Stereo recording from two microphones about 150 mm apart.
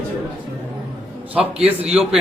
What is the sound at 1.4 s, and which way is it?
Speech, 40° right (ahead or behind).